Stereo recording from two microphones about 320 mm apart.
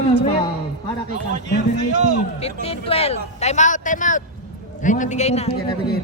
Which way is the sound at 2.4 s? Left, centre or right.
Centre.